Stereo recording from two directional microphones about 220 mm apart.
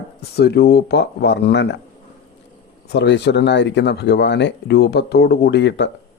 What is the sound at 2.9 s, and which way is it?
Speech, 50° left (ahead or behind).